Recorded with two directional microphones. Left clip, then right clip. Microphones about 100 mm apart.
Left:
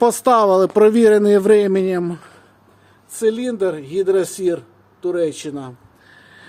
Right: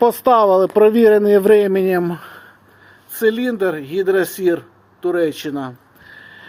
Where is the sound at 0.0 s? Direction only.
40° left (ahead or behind); by 2.0 s 5° left (ahead or behind).